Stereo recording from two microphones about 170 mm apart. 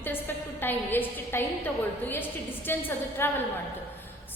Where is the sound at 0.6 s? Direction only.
10° left (ahead or behind).